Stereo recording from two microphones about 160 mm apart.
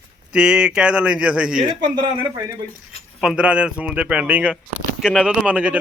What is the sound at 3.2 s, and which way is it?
A man's voice, 5° right (ahead or behind).